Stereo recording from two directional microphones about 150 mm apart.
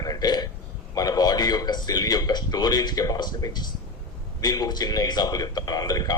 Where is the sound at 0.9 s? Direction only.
25° left (ahead or behind).